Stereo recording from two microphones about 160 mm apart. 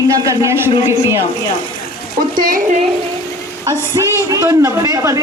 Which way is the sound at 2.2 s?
60° right (ahead or behind).